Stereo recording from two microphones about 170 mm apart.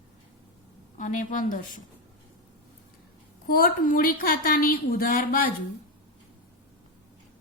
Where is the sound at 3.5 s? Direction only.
60° left (ahead or behind).